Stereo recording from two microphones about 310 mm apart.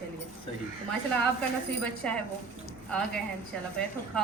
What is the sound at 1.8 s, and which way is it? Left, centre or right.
Speech, centre.